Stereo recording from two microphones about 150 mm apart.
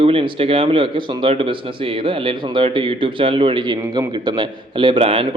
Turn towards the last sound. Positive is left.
turn(degrees=-40)  # may be behind; listen again after turning